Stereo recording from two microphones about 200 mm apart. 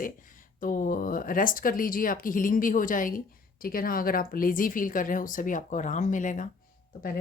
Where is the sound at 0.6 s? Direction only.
45° left (ahead or behind).